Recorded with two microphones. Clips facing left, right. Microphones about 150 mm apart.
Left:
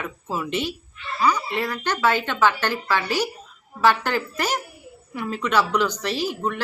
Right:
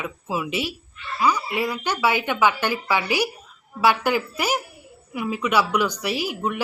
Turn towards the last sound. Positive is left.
turn(degrees=-10)  # may be behind; listen again after turning